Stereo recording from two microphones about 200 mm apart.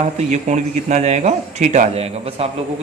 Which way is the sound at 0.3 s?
35° right (ahead or behind).